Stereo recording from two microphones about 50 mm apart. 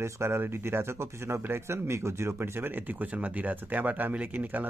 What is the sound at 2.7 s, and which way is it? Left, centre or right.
A man's voice, right.